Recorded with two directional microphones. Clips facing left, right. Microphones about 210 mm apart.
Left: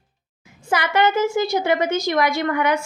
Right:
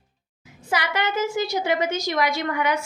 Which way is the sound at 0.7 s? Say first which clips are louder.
Left 6 dB; 50° left (ahead or behind).